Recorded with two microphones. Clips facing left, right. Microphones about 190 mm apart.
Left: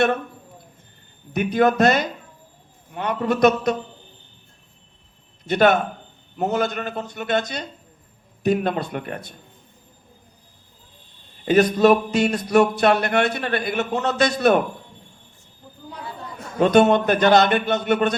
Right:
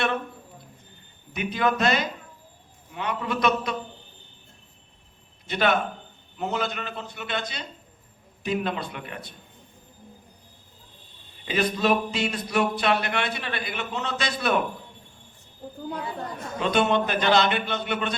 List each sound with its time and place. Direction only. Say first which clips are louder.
1.3 s speech: left 7 dB; 45° left (ahead or behind)
5.5 s speech: left 7 dB; 45° left (ahead or behind)
11.4 s speech: left 9 dB; 45° left (ahead or behind)
16.6 s speech: left 8 dB; 45° left (ahead or behind)